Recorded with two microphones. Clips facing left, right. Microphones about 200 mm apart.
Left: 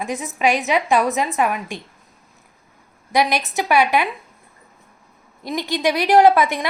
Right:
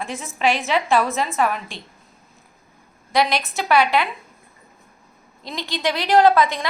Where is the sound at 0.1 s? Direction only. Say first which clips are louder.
Left 5 dB; 40° left (ahead or behind).